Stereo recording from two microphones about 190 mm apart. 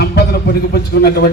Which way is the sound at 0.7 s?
55° left (ahead or behind).